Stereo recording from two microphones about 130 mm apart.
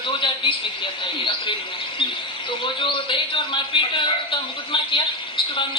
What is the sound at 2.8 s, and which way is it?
A man's voice, 40° left (ahead or behind).